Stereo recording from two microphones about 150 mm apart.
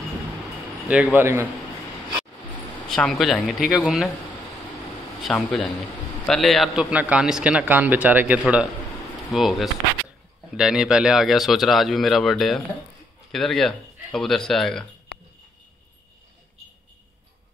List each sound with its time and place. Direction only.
0.8 s a man's voice: 10° right (ahead or behind)
2.9 s speech: centre (ahead or behind)
5.2 s a man's voice: centre (ahead or behind)
15.1 s a sound: 90° left